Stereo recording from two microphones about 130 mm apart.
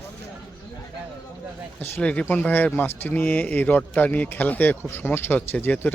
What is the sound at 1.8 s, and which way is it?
Speech, 10° left (ahead or behind).